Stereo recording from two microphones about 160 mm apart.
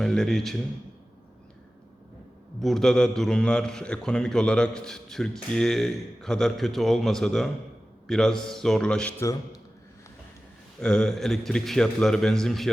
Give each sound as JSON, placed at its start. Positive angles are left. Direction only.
{"t": 0.0, "sound": "a man's voice", "side_deg": 5}
{"t": 2.6, "sound": "a man's voice", "side_deg": 0}
{"t": 9.2, "sound": "a man's voice", "side_deg": 20}
{"t": 10.8, "sound": "a man's voice", "side_deg": 5}